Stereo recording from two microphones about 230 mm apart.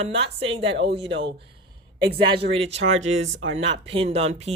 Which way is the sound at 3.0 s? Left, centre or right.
Right.